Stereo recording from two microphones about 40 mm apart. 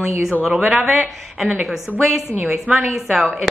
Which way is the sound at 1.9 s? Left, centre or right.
Right.